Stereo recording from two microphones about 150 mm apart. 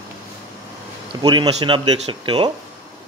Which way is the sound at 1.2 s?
30° right (ahead or behind).